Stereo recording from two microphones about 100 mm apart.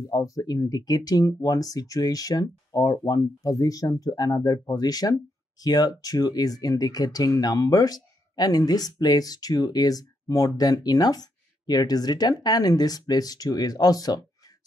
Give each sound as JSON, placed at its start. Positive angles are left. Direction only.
{"t": 0.1, "sound": "speech", "side_deg": 35}